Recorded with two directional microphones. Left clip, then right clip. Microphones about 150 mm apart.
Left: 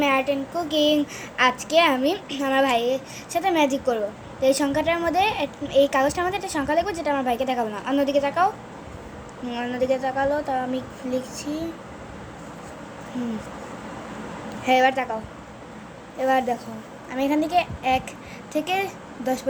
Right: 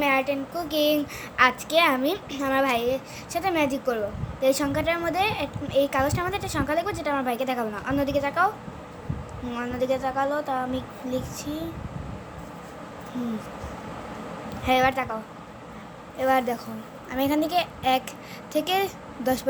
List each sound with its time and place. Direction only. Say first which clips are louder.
0.0 s speech: left 2 dB; 10° right (ahead or behind)
14.6 s speech: left 3 dB; 10° right (ahead or behind)
16.1 s a woman's voice: left 1 dB; 15° right (ahead or behind)